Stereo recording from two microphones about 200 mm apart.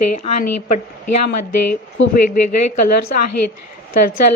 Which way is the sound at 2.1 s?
40° left (ahead or behind).